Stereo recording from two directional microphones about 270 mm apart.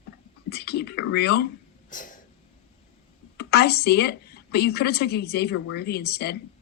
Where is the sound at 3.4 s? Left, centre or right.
Left.